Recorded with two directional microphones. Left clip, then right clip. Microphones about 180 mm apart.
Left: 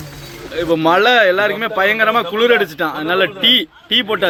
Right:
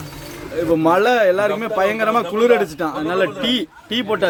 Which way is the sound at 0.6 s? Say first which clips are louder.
Left 2 dB; 5° right (ahead or behind).